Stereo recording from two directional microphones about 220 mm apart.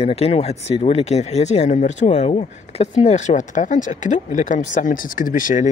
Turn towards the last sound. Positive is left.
turn(degrees=35)  # may be behind; listen again after turning